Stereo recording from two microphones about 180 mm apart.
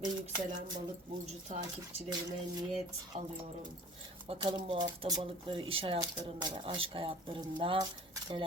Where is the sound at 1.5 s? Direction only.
40° right (ahead or behind).